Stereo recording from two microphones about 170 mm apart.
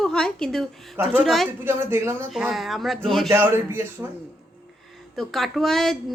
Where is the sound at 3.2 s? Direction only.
15° right (ahead or behind).